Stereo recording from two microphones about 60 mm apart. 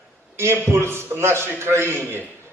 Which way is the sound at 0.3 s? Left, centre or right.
Right.